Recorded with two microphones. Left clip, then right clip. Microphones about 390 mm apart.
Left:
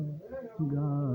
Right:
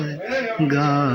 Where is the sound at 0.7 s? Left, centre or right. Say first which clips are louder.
Right 17 dB; left.